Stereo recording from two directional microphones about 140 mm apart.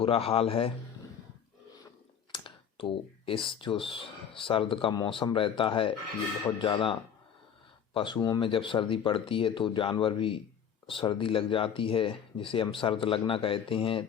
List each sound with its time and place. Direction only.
0.0 s a man's voice: 45° left (ahead or behind)
2.3 s speech: 40° left (ahead or behind)
7.9 s speech: 35° left (ahead or behind)